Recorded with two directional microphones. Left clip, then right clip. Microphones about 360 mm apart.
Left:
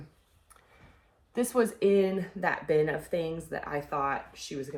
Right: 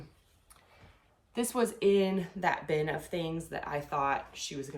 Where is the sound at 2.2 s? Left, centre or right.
Centre.